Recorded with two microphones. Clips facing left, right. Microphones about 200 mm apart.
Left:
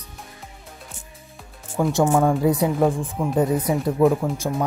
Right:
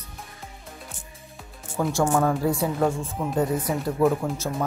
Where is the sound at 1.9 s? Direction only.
15° left (ahead or behind).